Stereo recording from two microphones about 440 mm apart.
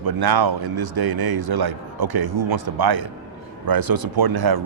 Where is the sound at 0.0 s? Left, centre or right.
Right.